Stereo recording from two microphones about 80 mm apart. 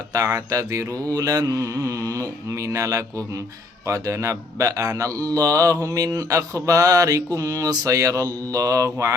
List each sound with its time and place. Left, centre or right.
0.1 s speech: right